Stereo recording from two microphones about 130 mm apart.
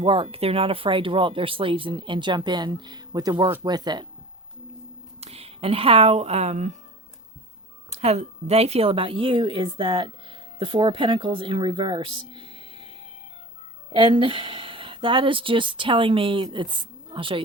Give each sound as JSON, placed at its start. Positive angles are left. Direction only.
{"t": 0.0, "sound": "speech", "side_deg": -45}
{"t": 5.2, "sound": "speech", "side_deg": -50}
{"t": 7.9, "sound": "speech", "side_deg": -60}
{"t": 12.4, "sound": "music", "side_deg": -40}
{"t": 13.9, "sound": "speech", "side_deg": -40}